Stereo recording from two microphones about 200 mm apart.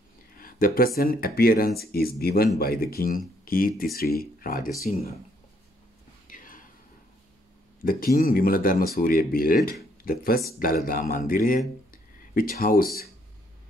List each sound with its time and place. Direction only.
0.4 s speech: 45° left (ahead or behind)
6.2 s whispering: 45° left (ahead or behind)
7.8 s speech: 45° left (ahead or behind)